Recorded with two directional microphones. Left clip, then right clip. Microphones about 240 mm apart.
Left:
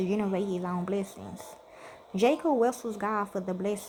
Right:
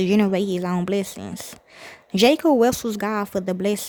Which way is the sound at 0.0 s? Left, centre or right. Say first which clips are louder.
Right 9 dB; right.